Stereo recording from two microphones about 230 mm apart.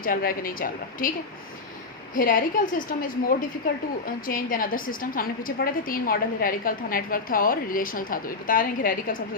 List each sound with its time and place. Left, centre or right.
0.0 s a woman's voice: left
2.1 s a woman's voice: left